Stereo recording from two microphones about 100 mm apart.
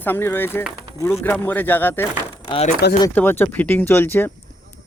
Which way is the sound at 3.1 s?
20° left (ahead or behind).